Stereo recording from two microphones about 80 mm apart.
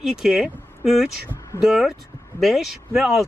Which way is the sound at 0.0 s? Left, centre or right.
Centre.